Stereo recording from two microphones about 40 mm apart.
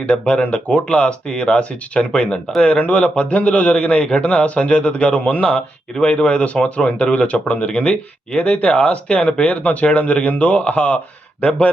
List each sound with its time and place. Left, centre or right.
0.0 s speech: left
5.5 s speech: left